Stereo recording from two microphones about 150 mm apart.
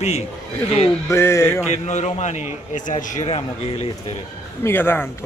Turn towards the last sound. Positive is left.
turn(degrees=15)  # may be behind; listen again after turning